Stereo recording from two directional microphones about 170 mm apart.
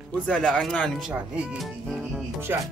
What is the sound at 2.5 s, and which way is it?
Speech, 15° right (ahead or behind).